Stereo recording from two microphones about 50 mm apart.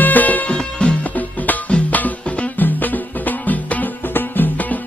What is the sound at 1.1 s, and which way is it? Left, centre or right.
Music, left.